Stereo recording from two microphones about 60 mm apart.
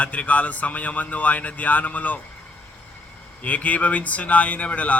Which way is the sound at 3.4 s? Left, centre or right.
Left.